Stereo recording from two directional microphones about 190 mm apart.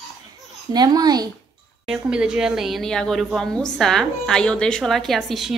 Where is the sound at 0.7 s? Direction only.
20° right (ahead or behind).